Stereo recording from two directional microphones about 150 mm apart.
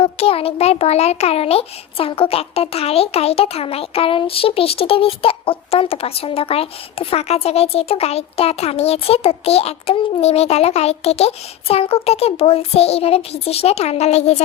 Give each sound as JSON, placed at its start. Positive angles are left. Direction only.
{"t": 0.0, "sound": "a child's voice", "side_deg": 40}